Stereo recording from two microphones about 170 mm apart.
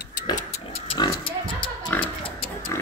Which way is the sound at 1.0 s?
25° left (ahead or behind).